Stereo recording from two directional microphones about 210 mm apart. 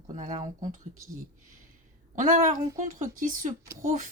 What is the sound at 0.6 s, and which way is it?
Speech, 40° right (ahead or behind).